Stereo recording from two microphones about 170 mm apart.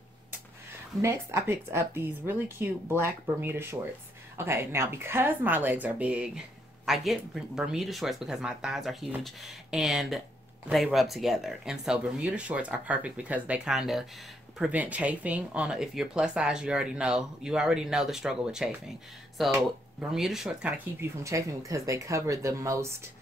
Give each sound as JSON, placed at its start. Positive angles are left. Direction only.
{"t": 1.0, "sound": "speech", "side_deg": -15}